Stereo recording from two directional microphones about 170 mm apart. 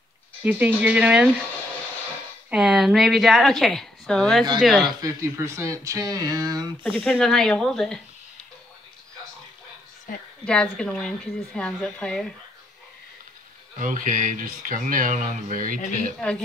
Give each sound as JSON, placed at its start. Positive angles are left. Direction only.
{"t": 0.4, "sound": "speech", "side_deg": -10}
{"t": 2.5, "sound": "speech", "side_deg": -5}
{"t": 5.0, "sound": "speech", "side_deg": -15}
{"t": 6.8, "sound": "speech", "side_deg": 10}
{"t": 10.4, "sound": "speech", "side_deg": 5}
{"t": 13.7, "sound": "speech", "side_deg": -50}
{"t": 16.2, "sound": "speech", "side_deg": 5}